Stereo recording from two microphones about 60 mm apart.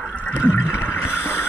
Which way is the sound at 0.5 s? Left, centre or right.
Left.